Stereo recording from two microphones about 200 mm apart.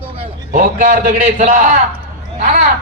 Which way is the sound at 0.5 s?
45° right (ahead or behind).